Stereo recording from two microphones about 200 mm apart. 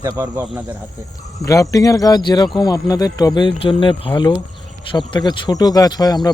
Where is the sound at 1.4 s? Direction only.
15° left (ahead or behind).